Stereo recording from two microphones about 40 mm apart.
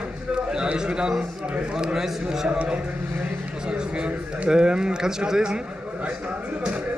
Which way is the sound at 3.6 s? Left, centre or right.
Right.